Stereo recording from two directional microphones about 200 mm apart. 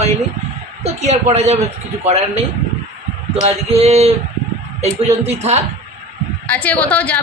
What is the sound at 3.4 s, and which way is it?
A woman's voice, 30° right (ahead or behind).